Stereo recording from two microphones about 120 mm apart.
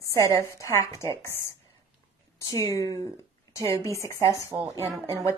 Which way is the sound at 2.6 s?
25° left (ahead or behind).